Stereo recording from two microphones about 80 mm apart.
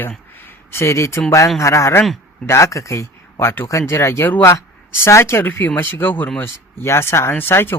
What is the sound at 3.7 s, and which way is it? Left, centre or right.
Speech, left.